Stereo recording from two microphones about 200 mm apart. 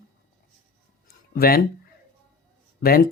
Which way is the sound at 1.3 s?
50° left (ahead or behind).